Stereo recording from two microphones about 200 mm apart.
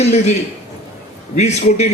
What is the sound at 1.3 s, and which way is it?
Speech, 35° left (ahead or behind).